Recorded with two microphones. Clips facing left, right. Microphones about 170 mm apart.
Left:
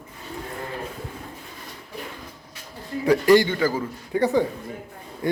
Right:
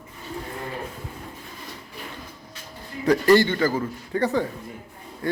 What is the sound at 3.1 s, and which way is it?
A man's voice, 15° left (ahead or behind).